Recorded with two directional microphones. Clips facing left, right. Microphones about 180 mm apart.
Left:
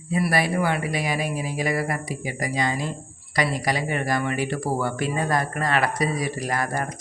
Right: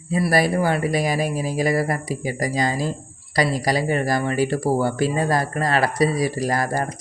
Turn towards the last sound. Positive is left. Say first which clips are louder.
# right 4 dB
turn(degrees=-35)  # may be behind; listen again after turning